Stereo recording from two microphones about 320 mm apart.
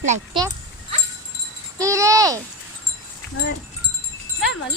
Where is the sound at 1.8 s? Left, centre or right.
Centre.